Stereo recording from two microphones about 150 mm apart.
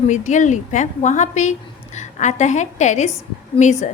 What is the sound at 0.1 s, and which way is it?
A woman's voice, 55° left (ahead or behind).